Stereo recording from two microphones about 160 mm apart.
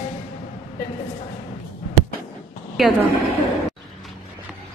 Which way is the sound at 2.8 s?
Centre (ahead or behind).